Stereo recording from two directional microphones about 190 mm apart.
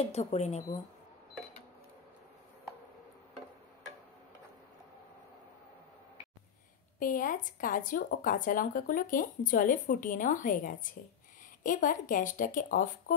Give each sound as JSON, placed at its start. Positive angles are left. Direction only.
{"t": 0.1, "sound": "speech", "side_deg": 35}
{"t": 7.0, "sound": "speech", "side_deg": 45}